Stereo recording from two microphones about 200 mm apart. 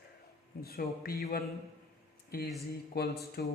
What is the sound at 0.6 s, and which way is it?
Speech, 50° left (ahead or behind).